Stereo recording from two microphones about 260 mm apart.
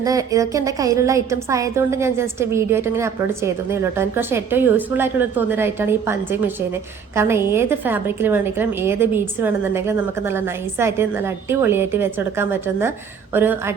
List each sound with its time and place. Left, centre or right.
0.0 s a woman's voice: centre